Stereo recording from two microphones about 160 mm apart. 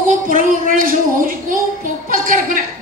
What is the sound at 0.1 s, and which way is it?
A man's voice, 55° right (ahead or behind).